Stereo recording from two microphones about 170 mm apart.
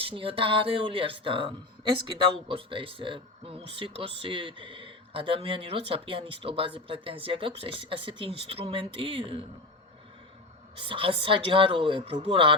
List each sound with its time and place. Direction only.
0.0 s speech: 30° right (ahead or behind)
10.8 s speech: 30° right (ahead or behind)